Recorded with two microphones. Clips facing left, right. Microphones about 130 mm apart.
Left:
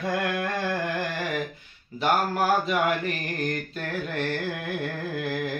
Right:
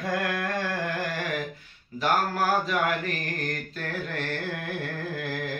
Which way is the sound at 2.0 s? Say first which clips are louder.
Left 2 dB; 10° left (ahead or behind).